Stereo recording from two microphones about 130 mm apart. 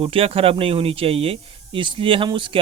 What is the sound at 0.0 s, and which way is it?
Speech, 45° right (ahead or behind).